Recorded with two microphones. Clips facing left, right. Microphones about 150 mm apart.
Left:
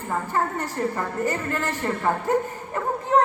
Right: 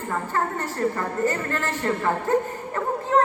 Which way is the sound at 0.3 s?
15° left (ahead or behind).